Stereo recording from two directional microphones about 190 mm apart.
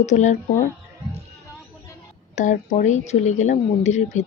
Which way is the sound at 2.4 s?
40° left (ahead or behind).